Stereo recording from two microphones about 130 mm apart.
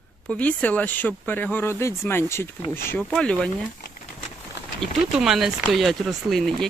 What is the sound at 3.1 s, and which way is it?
Speech, 5° left (ahead or behind).